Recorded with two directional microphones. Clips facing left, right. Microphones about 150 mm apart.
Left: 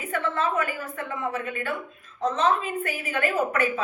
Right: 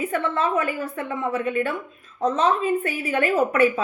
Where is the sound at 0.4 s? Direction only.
30° right (ahead or behind).